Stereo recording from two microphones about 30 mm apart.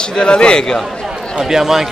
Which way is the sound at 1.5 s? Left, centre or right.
Centre.